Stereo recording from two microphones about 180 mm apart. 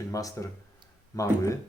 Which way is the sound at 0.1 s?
20° left (ahead or behind).